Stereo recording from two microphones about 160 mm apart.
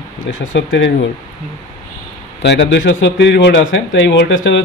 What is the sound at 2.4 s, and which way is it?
Speech, 90° left.